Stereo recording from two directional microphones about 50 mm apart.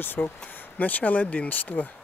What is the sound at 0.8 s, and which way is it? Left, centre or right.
Speech, left.